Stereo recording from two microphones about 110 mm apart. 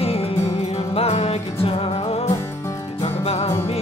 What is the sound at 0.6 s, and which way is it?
Music, 80° left.